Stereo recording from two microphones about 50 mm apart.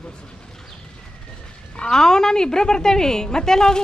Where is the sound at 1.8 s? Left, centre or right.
Centre.